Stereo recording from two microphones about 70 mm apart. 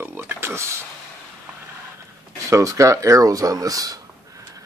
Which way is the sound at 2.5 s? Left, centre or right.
Right.